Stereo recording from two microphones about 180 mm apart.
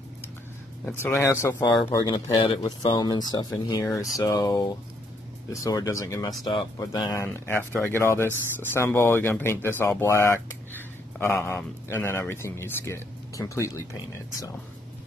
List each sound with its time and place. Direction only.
0.8 s speech: 10° left (ahead or behind)